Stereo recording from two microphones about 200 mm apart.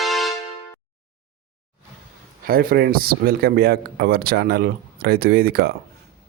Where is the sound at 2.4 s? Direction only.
45° right (ahead or behind).